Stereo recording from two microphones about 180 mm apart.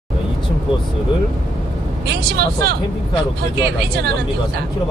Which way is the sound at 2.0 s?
65° right (ahead or behind).